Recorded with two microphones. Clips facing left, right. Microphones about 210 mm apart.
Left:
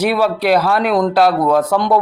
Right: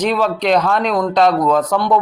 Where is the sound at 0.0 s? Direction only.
10° left (ahead or behind).